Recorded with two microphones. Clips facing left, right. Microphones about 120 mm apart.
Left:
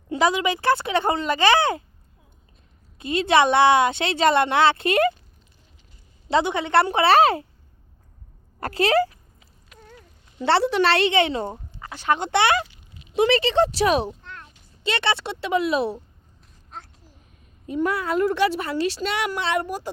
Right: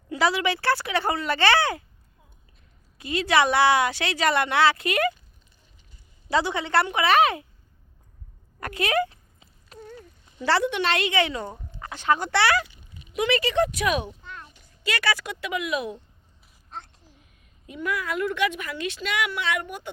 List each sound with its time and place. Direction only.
0.1 s a woman's voice: 20° left (ahead or behind)
3.0 s a woman's voice: 25° left (ahead or behind)
6.2 s a woman's voice: 20° left (ahead or behind)
8.6 s a woman's voice: 30° left (ahead or behind)
9.7 s a sound: 35° right (ahead or behind)
10.3 s a woman's voice: 25° left (ahead or behind)
14.2 s a sound: 5° right (ahead or behind)
14.8 s a woman's voice: 25° left (ahead or behind)
17.7 s a woman's voice: 35° left (ahead or behind)